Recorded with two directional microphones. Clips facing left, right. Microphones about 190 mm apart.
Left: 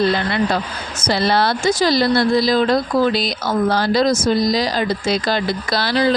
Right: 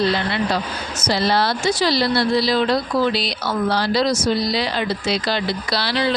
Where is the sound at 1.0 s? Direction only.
55° left (ahead or behind).